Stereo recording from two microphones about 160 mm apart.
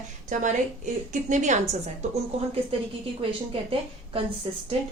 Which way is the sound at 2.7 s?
35° right (ahead or behind).